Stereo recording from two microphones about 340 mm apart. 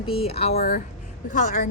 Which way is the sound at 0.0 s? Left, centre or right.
Centre.